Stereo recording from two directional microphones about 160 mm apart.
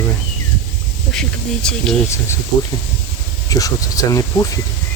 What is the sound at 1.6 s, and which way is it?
Speech, 5° left (ahead or behind).